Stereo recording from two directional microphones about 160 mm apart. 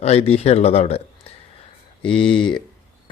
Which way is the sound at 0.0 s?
40° left (ahead or behind).